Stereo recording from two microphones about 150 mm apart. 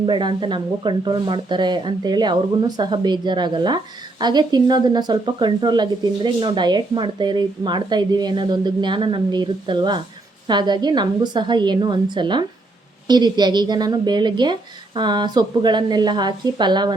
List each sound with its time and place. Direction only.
0.0 s a woman's voice: 30° right (ahead or behind)